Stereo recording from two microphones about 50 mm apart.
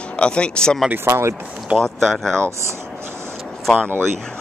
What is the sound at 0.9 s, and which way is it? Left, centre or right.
Speech, right.